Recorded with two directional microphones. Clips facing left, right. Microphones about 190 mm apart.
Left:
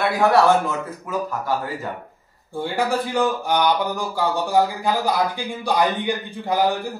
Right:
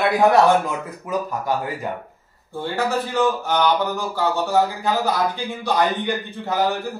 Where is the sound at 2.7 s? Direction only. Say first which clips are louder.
Even; 15° left (ahead or behind).